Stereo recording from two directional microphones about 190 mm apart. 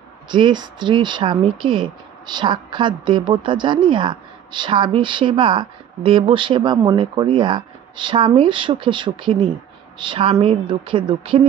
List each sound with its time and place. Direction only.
0.3 s speech: 25° right (ahead or behind)